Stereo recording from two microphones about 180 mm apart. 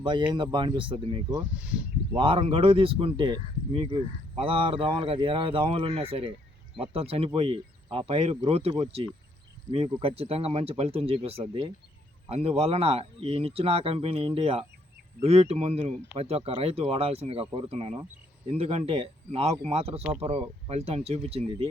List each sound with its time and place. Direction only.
0.0 s speech: 25° right (ahead or behind)
1.3 s speech: 10° right (ahead or behind)
2.1 s speech: 30° right (ahead or behind)